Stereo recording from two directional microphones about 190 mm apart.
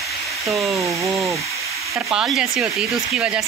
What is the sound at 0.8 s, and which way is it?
Speech, 15° right (ahead or behind).